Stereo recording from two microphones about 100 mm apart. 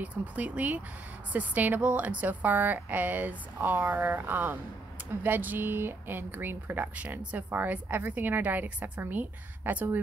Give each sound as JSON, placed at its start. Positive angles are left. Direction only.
{"t": 0.0, "sound": "speech", "side_deg": -15}